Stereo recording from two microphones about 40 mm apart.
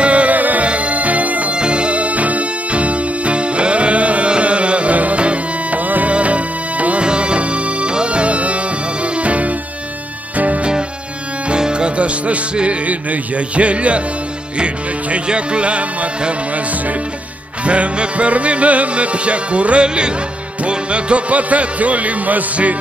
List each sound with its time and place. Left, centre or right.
0.0 s music: right
1.5 s music: right
5.9 s music: right
6.1 s music: right
11.4 s music: right
17.6 s music: right